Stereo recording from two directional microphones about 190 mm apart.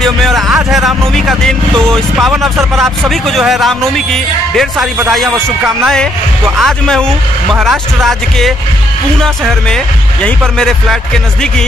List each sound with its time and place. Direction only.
0.0 s a man's voice: centre (ahead or behind)
6.6 s a man's voice: 5° left (ahead or behind)